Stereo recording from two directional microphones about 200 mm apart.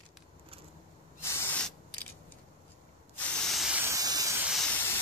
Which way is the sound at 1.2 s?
5° left (ahead or behind).